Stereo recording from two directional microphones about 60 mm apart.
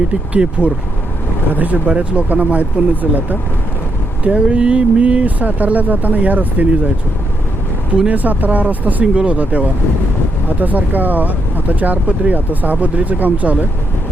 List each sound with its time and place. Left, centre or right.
0.6 s speech: left
1.5 s speech: right
8.1 s speech: right